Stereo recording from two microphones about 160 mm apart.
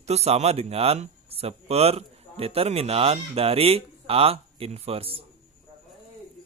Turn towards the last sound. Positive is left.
turn(degrees=-35)  # may be behind; listen again after turning